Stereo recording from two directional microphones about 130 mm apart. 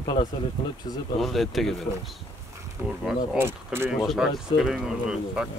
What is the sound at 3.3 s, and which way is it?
Speech, 20° right (ahead or behind).